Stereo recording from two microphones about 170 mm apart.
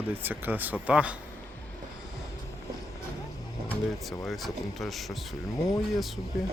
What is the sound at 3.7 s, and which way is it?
Speech, 10° left (ahead or behind).